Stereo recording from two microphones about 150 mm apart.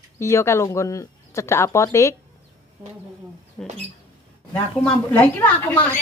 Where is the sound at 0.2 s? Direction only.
20° left (ahead or behind).